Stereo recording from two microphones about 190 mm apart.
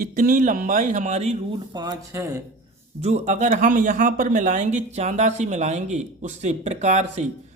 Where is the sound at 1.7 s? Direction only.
20° right (ahead or behind).